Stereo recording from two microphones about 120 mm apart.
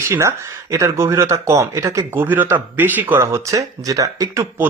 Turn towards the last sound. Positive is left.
turn(degrees=-30)  # may be behind; listen again after turning